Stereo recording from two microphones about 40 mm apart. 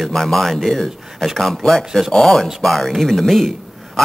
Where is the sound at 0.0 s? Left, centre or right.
Centre.